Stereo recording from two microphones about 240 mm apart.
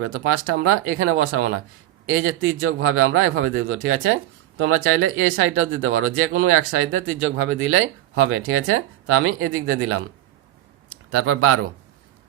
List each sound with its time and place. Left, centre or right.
0.0 s speech: right
11.1 s speech: right